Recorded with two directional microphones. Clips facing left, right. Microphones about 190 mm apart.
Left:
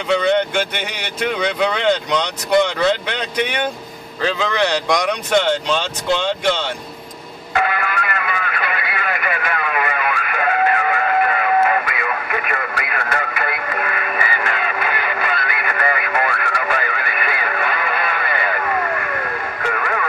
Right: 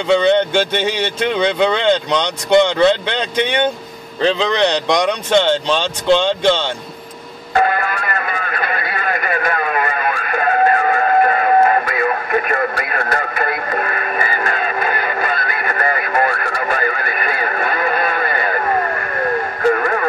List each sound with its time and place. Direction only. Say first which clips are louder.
0.1 s speech: right 4 dB; 30° right (ahead or behind)
7.5 s music: right 4 dB; 40° right (ahead or behind)